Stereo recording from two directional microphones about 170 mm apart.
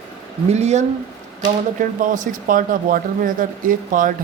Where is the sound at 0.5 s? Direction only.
40° right (ahead or behind).